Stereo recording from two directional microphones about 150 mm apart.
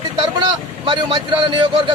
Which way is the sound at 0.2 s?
35° right (ahead or behind).